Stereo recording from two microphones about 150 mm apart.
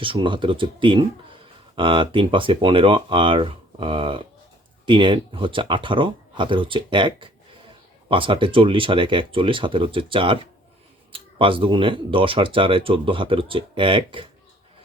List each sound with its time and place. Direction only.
0.0 s speech: 35° right (ahead or behind)